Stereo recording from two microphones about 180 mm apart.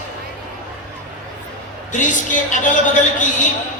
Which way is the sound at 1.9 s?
45° left (ahead or behind).